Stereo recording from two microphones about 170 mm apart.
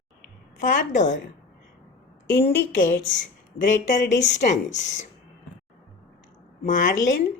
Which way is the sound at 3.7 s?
50° left (ahead or behind).